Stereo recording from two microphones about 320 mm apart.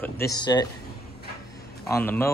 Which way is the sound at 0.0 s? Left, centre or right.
Centre.